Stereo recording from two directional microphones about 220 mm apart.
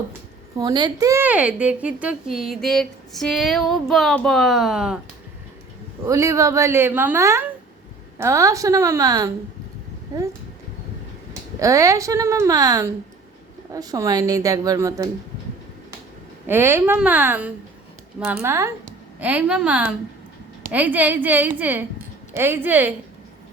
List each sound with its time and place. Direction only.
0.5 s a woman's voice: 20° right (ahead or behind); by 4.9 s 5° right (ahead or behind)
6.1 s a woman's voice: 15° right (ahead or behind)
11.6 s a woman's voice: 15° right (ahead or behind)
16.5 s a woman's voice: 10° right (ahead or behind)